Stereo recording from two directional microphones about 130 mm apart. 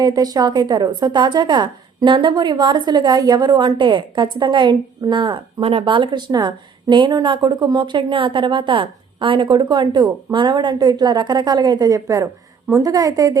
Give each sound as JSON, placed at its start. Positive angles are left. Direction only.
{"t": 0.0, "sound": "a woman's voice", "side_deg": -30}